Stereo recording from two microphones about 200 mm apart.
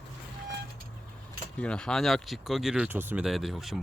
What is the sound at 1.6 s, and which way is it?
Speech, 5° left (ahead or behind).